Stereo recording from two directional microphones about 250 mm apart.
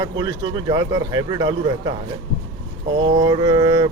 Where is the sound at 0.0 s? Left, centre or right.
Centre.